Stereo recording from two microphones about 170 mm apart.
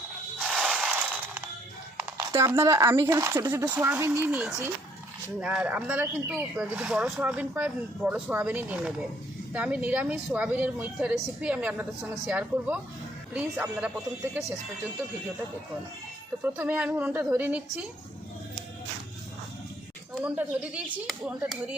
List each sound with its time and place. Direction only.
0.3 s a sound: 5° right (ahead or behind)
2.1 s speech: 15° right (ahead or behind)
16.4 s speech: 10° right (ahead or behind)
20.2 s speech: 10° right (ahead or behind)